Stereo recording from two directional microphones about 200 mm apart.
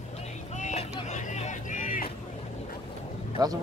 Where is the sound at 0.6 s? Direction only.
35° left (ahead or behind).